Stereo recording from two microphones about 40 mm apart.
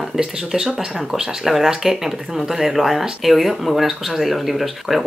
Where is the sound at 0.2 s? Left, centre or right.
Centre.